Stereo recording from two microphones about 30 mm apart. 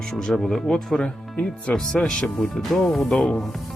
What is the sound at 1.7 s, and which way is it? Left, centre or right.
Speech, left.